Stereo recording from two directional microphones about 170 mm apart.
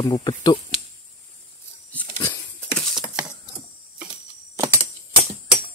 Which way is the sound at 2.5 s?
5° left (ahead or behind).